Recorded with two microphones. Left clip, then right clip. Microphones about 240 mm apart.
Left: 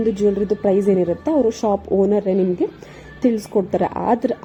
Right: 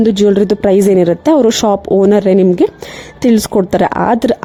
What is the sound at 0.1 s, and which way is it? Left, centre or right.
A woman's voice, right.